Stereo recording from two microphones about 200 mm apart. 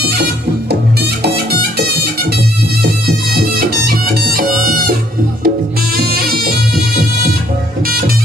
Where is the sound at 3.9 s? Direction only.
45° right (ahead or behind).